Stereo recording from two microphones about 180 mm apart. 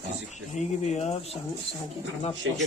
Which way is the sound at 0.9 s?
40° left (ahead or behind).